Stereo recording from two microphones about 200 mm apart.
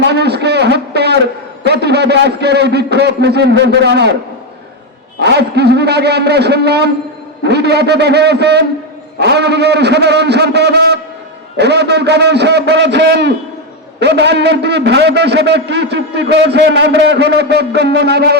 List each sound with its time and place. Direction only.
0.0 s a man's voice: 55° right (ahead or behind)
5.2 s a man's voice: 55° right (ahead or behind)